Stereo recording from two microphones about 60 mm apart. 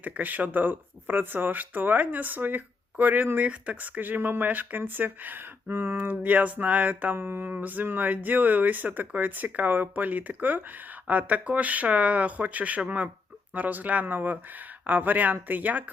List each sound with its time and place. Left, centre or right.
0.0 s speech: right
4.0 s speech: right